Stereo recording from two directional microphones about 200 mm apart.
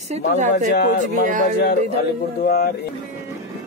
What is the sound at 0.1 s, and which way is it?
Speech, 35° right (ahead or behind).